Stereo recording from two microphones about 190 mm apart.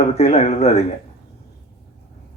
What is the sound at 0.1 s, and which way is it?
Speech, 35° left (ahead or behind).